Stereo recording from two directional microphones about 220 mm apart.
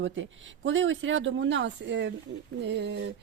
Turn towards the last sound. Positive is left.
turn(degrees=-50)  # may be behind; listen again after turning